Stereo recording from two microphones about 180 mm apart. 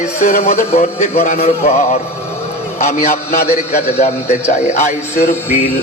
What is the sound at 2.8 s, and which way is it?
A man's voice, 40° left (ahead or behind).